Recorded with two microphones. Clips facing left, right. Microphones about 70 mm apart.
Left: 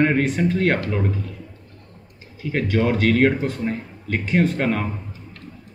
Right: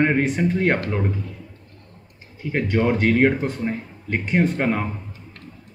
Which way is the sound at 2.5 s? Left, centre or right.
Centre.